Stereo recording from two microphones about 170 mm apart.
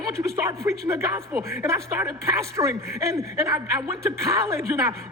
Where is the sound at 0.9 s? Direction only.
15° right (ahead or behind).